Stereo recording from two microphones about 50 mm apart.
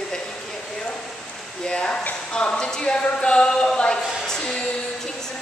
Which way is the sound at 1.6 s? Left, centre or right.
Centre.